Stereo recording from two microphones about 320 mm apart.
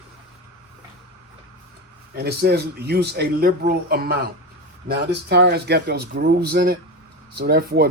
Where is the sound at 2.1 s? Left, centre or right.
Right.